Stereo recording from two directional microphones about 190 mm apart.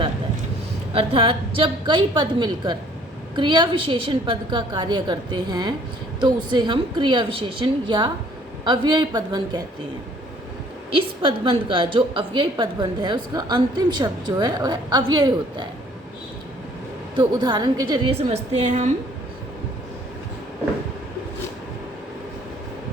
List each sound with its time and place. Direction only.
0.9 s a woman's voice: 30° right (ahead or behind)
10.9 s a woman's voice: 25° right (ahead or behind)
17.2 s a woman's voice: 20° right (ahead or behind); by 18.9 s 40° right (ahead or behind)